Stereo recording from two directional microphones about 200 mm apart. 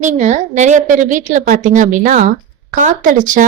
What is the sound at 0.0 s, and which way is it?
Speech, 35° right (ahead or behind).